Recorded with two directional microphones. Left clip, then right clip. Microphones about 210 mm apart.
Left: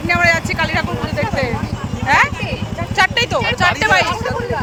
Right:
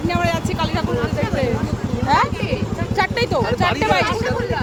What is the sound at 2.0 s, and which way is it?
Clip-clop, 15° right (ahead or behind).